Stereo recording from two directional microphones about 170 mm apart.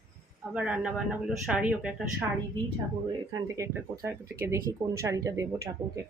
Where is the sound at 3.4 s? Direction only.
15° right (ahead or behind).